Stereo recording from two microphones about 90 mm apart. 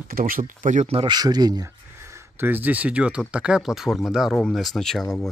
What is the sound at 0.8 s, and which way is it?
Speech, 90° right.